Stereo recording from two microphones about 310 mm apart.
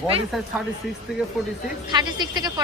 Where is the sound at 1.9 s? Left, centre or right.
Centre.